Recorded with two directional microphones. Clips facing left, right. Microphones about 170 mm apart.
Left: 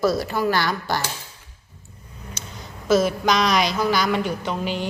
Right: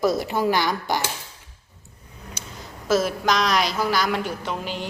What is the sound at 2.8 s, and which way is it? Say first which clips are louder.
A woman's voice: left 2 dB; centre (ahead or behind).